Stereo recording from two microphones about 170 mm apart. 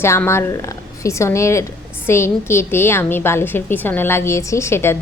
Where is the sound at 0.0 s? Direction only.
15° left (ahead or behind).